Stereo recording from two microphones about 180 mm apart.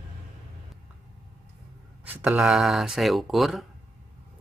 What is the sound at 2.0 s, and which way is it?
Speech, 5° right (ahead or behind).